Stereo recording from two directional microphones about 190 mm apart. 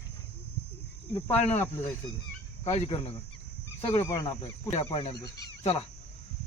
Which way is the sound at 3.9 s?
15° left (ahead or behind).